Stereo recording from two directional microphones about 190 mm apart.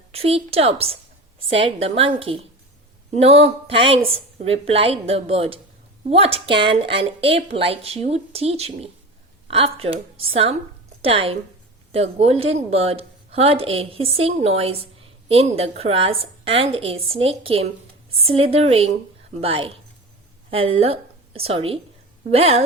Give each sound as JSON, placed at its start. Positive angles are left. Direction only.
{"t": 0.1, "sound": "a woman's voice", "side_deg": -30}